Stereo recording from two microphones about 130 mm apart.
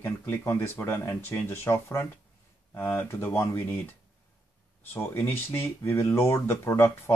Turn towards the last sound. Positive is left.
turn(degrees=20)  # may be behind; listen again after turning